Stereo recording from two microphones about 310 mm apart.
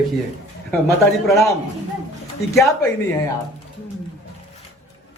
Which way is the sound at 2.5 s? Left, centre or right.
Centre.